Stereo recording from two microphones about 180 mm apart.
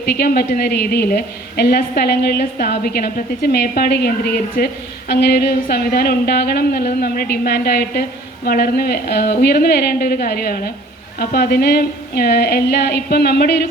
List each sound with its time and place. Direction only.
0.0 s a woman's voice: 60° left (ahead or behind)